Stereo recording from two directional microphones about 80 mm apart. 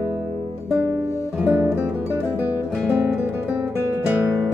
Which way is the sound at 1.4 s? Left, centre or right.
Centre.